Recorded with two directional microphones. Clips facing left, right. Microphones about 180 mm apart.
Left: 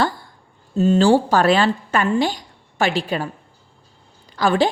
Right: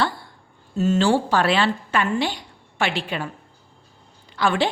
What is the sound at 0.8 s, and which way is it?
A woman's voice, 35° left (ahead or behind).